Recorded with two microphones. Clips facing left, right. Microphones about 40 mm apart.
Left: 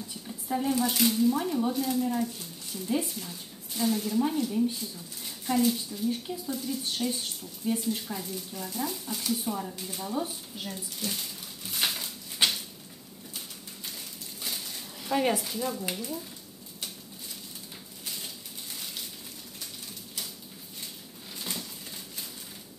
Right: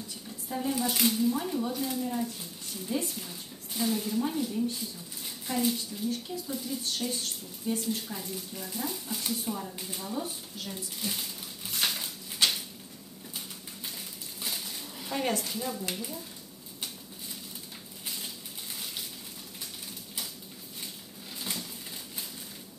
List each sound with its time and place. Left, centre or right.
0.5 s speech: centre
0.7 s speech: centre
4.5 s speech: centre
4.7 s speech: centre
6.0 s speech: centre
6.5 s speech: centre
10.1 s speech: centre
11.0 s a sound: centre
11.8 s crushing: centre
12.4 s cupboard open or close: centre
14.4 s a sound: centre
15.1 s speech: centre
18.0 s a sound: centre
21.4 s a sound: centre